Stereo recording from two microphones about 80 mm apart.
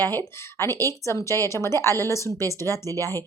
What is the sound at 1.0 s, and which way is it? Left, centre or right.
A woman's voice, left.